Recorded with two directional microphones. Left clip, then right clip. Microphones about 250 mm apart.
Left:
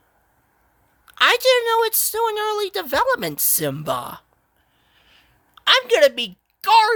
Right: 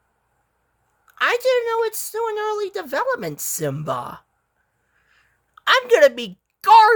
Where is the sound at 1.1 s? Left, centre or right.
Centre.